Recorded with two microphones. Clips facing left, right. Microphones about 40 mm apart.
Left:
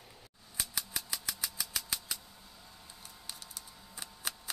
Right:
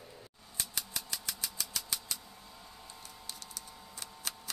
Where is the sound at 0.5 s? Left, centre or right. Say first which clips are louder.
Left 1 dB; centre.